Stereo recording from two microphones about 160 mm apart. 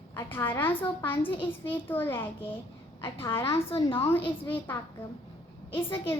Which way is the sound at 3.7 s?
35° left (ahead or behind).